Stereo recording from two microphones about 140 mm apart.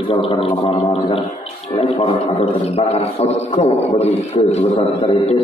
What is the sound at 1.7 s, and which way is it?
A man's voice, 40° left (ahead or behind).